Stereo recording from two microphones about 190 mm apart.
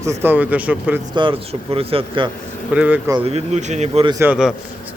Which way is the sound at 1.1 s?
25° right (ahead or behind).